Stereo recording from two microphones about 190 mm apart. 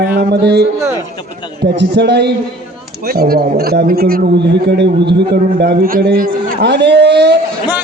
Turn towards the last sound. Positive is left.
turn(degrees=-60)  # may be behind; listen again after turning